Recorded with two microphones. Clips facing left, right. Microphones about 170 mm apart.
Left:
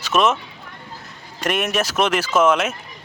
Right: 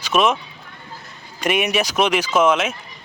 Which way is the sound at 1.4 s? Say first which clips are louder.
Right 2 dB; centre (ahead or behind).